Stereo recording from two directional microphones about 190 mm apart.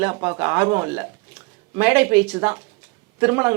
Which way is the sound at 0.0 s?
15° right (ahead or behind).